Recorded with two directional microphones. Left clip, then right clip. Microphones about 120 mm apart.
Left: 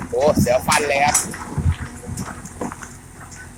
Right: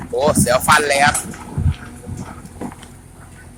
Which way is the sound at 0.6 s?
30° right (ahead or behind).